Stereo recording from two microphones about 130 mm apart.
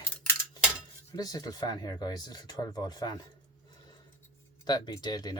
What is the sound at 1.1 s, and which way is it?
Speech, 30° left (ahead or behind).